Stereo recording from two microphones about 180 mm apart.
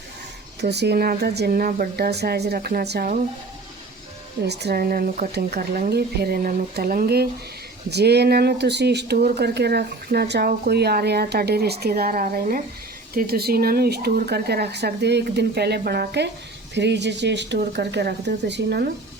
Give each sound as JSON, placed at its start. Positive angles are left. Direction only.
{"t": 0.6, "sound": "speech", "side_deg": -65}
{"t": 4.4, "sound": "speech", "side_deg": -65}